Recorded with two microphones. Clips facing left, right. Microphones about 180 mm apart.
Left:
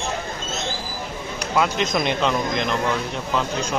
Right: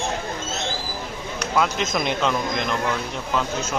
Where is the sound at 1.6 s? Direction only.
Centre (ahead or behind).